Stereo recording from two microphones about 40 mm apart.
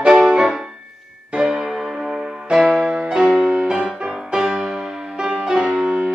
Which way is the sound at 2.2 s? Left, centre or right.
Right.